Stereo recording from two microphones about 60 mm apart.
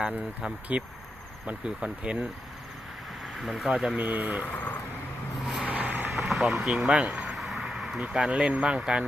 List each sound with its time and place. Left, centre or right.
0.2 s speech: centre
3.3 s speech: centre
3.9 s speech: right
4.4 s speech: left
5.6 s vehicle: right
6.1 s speech: centre